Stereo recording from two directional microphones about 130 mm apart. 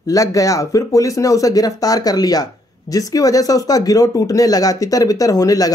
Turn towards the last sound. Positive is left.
turn(degrees=30)  # may be behind; listen again after turning